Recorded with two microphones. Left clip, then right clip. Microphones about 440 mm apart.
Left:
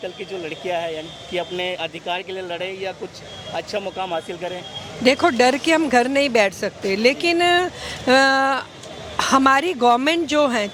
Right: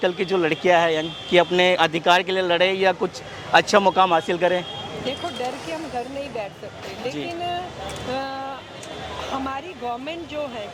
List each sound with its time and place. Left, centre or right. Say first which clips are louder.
0.0 s speech: right 8 dB; right
5.0 s speech: left 13 dB; left